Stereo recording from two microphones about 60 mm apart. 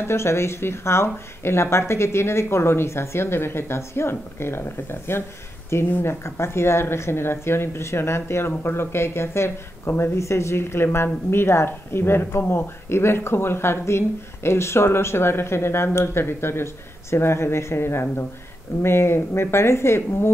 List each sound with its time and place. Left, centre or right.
0.0 s speech: left